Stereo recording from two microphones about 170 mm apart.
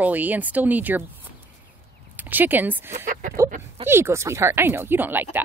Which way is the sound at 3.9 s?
15° right (ahead or behind).